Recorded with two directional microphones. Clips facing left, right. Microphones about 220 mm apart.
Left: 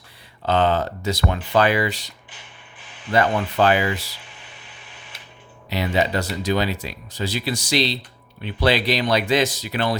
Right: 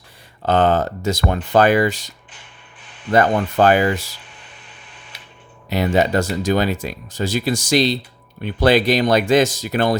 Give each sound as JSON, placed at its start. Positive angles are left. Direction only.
{"t": 0.4, "sound": "speech", "side_deg": -50}
{"t": 5.6, "sound": "speech", "side_deg": -50}